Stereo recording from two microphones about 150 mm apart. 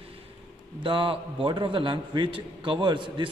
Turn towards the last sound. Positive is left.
turn(degrees=-35)  # may be behind; listen again after turning